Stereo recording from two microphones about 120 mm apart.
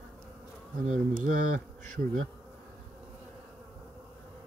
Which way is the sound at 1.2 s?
90° right.